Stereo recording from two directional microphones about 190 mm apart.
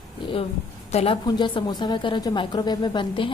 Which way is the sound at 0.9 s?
30° left (ahead or behind).